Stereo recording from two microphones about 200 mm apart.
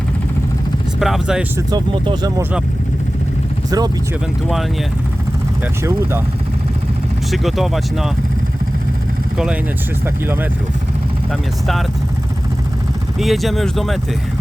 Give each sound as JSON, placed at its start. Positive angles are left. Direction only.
{"t": 0.9, "sound": "speech", "side_deg": 0}
{"t": 1.5, "sound": "speech", "side_deg": -25}
{"t": 3.7, "sound": "speech", "side_deg": -20}
{"t": 5.8, "sound": "speech", "side_deg": -15}
{"t": 7.3, "sound": "speech", "side_deg": 0}
{"t": 13.1, "sound": "speech", "side_deg": 0}